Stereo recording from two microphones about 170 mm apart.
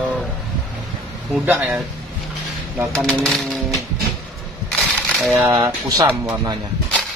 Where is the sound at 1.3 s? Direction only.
5° right (ahead or behind).